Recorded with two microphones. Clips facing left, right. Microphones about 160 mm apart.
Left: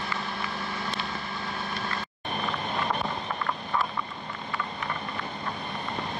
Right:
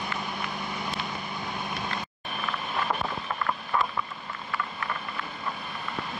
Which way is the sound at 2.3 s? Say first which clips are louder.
Left 2 dB; 5° right (ahead or behind).